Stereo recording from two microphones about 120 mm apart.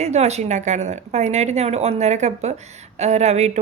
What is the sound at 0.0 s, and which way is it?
A woman's voice, 65° right (ahead or behind).